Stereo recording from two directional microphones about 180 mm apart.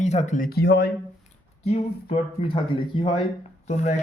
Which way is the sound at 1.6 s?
35° left (ahead or behind).